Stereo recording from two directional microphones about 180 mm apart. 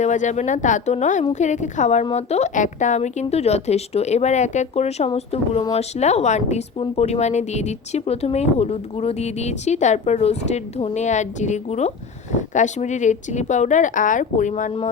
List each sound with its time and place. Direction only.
0.0 s a woman's voice: 40° left (ahead or behind)